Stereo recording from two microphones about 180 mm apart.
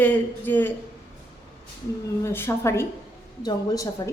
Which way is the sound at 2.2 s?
15° left (ahead or behind).